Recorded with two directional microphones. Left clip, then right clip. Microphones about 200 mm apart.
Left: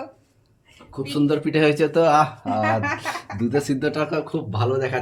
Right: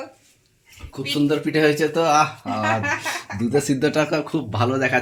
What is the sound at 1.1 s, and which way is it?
Speech, 20° left (ahead or behind).